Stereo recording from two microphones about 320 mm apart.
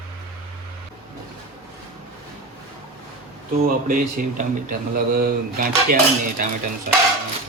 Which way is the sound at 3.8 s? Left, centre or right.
Right.